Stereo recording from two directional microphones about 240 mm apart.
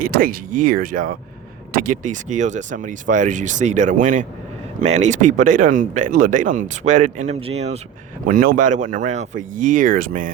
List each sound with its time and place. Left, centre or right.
0.0 s speech: right